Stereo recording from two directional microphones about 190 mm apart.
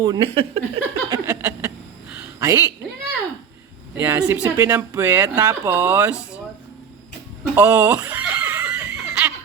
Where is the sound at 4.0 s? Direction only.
10° right (ahead or behind).